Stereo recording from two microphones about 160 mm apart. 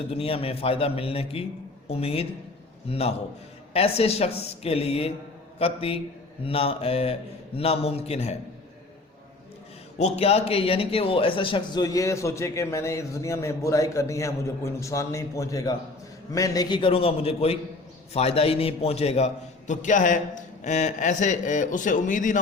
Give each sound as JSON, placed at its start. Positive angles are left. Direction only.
{"t": 0.1, "sound": "a man's voice", "side_deg": 35}
{"t": 10.0, "sound": "a man's voice", "side_deg": 40}